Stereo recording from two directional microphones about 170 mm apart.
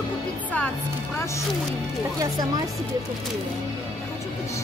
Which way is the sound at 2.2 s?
25° right (ahead or behind).